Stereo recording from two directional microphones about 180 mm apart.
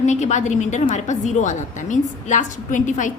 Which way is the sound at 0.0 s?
40° left (ahead or behind).